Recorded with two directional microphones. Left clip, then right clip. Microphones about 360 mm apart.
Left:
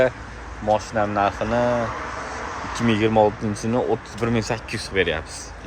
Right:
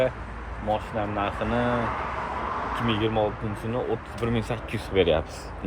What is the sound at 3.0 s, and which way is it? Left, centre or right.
Speech, left.